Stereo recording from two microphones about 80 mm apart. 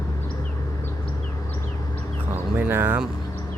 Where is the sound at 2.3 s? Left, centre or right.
Right.